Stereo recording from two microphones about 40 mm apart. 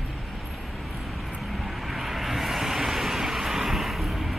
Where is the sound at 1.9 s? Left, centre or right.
Centre.